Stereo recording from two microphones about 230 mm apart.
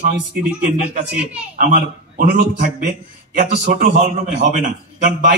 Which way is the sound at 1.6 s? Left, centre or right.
Right.